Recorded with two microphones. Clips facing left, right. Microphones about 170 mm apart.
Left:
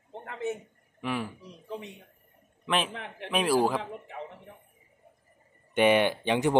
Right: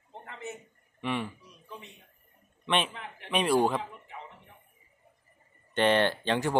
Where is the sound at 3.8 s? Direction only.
65° left (ahead or behind).